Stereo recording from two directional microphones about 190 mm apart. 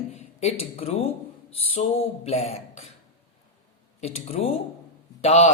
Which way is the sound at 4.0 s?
35° left (ahead or behind).